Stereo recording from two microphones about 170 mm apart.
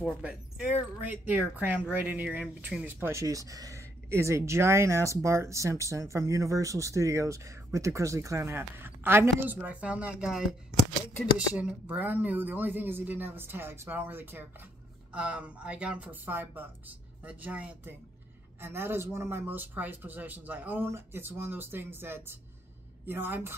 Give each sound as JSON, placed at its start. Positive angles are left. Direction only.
{"t": 0.2, "sound": "speech", "side_deg": -5}